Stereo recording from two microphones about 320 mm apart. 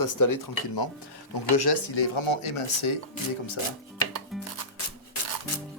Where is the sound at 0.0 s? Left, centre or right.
Left.